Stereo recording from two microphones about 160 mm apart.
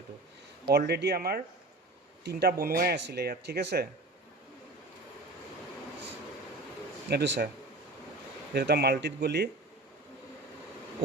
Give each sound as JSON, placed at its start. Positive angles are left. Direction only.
{"t": 0.7, "sound": "speech", "side_deg": -90}
{"t": 7.1, "sound": "speech", "side_deg": -90}
{"t": 8.5, "sound": "speech", "side_deg": -90}